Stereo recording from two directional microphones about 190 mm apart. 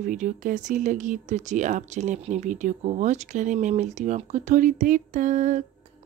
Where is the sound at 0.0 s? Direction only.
45° right (ahead or behind).